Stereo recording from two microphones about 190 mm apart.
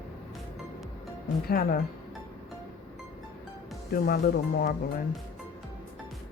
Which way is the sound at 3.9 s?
55° left (ahead or behind).